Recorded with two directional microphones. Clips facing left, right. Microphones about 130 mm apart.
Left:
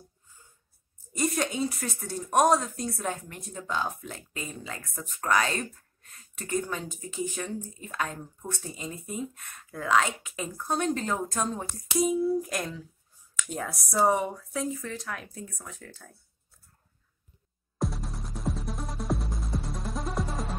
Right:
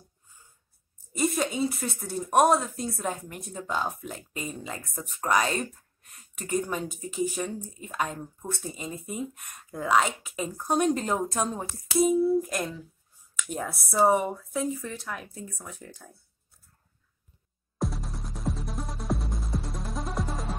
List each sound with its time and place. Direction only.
1.1 s speech: 5° right (ahead or behind)
15.8 s speech: 15° right (ahead or behind)
17.7 s music: centre (ahead or behind)